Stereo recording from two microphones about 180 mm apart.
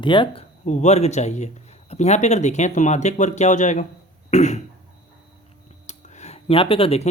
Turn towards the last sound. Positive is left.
turn(degrees=35)  # may be behind; listen again after turning